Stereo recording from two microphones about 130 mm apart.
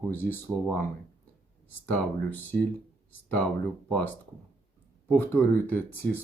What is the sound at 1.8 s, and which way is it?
Speech, 15° left (ahead or behind).